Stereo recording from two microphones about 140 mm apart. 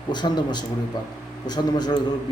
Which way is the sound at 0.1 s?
30° left (ahead or behind).